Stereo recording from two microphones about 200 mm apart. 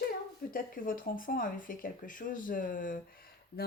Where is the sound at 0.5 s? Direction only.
45° left (ahead or behind).